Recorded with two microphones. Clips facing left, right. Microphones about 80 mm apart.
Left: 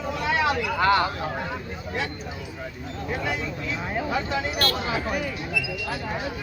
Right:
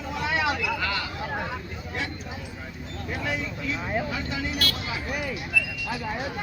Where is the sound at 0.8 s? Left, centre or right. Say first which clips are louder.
Left 10 dB; left.